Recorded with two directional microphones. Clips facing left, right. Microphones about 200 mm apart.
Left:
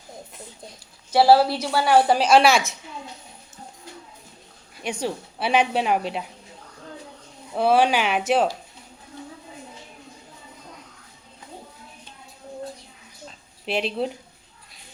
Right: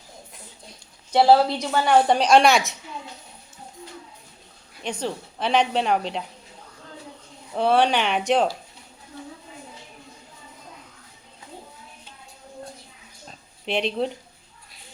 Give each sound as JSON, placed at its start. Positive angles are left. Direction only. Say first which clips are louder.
{"t": 1.1, "sound": "a woman's voice", "louder": "left 1 dB", "side_deg": 5}
{"t": 4.8, "sound": "speech", "louder": "left 1 dB", "side_deg": 10}
{"t": 7.5, "sound": "a woman's voice", "louder": "left 1 dB", "side_deg": 5}
{"t": 13.7, "sound": "a woman's voice", "louder": "right 1 dB", "side_deg": 5}